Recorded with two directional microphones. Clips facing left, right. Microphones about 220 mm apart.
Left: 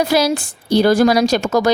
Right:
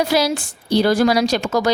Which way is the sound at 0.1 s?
50° left (ahead or behind).